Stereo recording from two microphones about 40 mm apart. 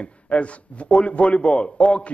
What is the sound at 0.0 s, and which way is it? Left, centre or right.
A man's voice, left.